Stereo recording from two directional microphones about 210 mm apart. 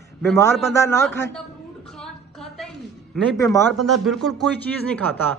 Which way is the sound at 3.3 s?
15° left (ahead or behind).